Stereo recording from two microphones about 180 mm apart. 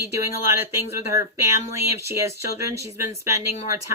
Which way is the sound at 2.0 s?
15° right (ahead or behind).